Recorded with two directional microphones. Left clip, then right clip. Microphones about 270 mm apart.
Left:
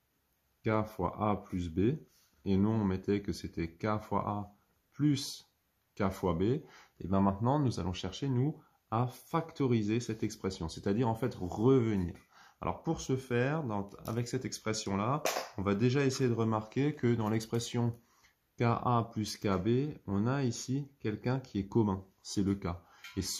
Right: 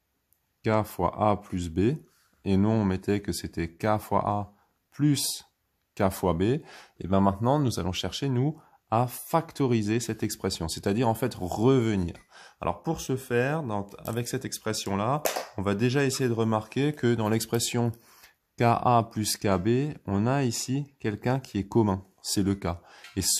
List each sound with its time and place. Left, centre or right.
0.6 s speech: right